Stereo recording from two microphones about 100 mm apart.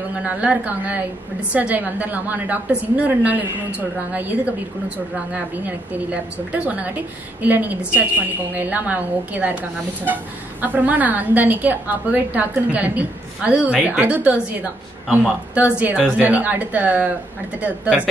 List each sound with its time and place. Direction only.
0.1 s a woman's voice: 10° right (ahead or behind)
6.5 s a woman's voice: 15° right (ahead or behind)
15.5 s a woman's voice: 15° right (ahead or behind)